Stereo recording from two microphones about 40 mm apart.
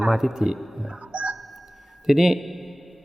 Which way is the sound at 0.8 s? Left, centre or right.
Right.